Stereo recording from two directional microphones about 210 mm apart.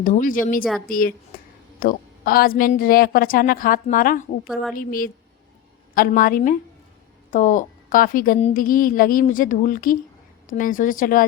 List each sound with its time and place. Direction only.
0.0 s a woman's voice: 40° left (ahead or behind)